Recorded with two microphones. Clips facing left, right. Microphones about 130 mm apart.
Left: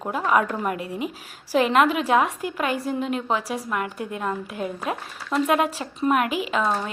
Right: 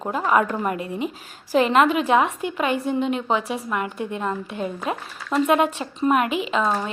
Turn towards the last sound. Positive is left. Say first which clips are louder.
# right 1 dB
turn(degrees=0)  # may be behind; listen again after turning